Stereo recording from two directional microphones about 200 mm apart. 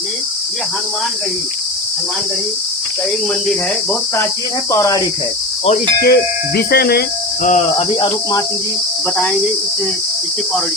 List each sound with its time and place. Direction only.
4.7 s cricket: 15° left (ahead or behind)
6.0 s speech: 50° left (ahead or behind)
7.4 s speech: 35° left (ahead or behind)
7.9 s cricket: 20° left (ahead or behind)
9.1 s cricket: centre (ahead or behind)